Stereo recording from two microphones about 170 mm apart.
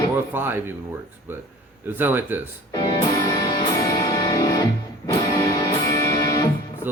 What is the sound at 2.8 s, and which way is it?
Music, 25° left (ahead or behind).